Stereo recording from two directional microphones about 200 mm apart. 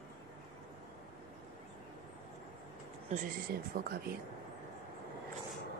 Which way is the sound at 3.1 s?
50° right (ahead or behind).